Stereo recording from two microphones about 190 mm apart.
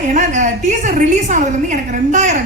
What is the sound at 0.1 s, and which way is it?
Speech, 40° right (ahead or behind).